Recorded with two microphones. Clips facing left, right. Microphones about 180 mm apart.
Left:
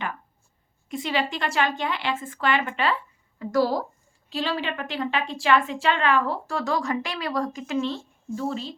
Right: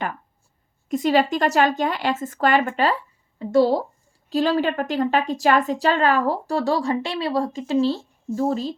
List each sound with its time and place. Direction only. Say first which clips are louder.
0.9 s a woman's voice: right 8 dB; 40° right (ahead or behind)
3.3 s speech: right 5 dB; 25° right (ahead or behind)
4.3 s a woman's voice: right 8 dB; 40° right (ahead or behind)